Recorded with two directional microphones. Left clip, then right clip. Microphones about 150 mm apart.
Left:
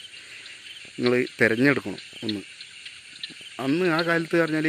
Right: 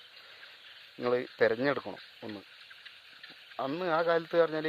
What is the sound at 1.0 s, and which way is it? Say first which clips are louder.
Speech: left 6 dB; centre (ahead or behind).